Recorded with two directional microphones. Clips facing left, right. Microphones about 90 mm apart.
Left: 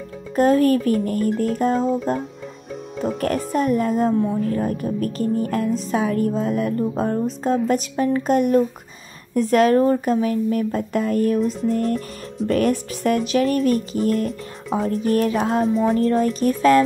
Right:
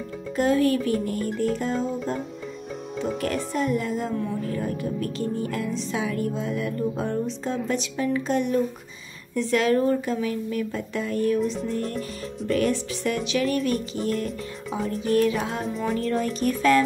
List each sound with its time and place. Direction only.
0.4 s music: 45° left (ahead or behind)
3.5 s music: 45° left (ahead or behind)
11.7 s speech: 40° left (ahead or behind)
12.4 s music: 45° left (ahead or behind)
14.9 s speech: 40° left (ahead or behind)
15.6 s music: centre (ahead or behind)
15.9 s speech: 40° left (ahead or behind)